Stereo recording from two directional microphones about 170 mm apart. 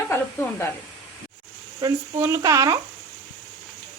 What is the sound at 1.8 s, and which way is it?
Speech, 15° right (ahead or behind).